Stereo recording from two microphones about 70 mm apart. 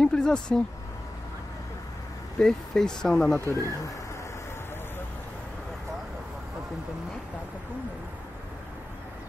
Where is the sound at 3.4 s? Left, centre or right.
Right.